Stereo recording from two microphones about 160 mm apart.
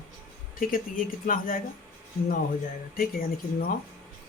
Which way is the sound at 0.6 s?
60° left (ahead or behind).